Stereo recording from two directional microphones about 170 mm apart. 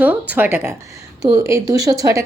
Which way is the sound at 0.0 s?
10° right (ahead or behind).